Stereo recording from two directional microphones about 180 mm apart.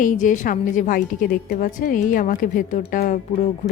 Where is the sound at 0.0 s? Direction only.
45° left (ahead or behind).